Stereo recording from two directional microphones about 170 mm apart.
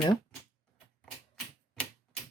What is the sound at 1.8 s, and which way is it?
Typewriter, 5° left (ahead or behind).